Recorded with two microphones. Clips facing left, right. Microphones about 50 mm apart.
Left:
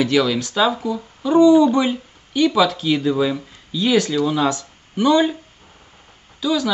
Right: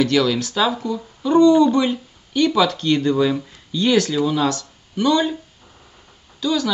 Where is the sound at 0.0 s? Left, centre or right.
Centre.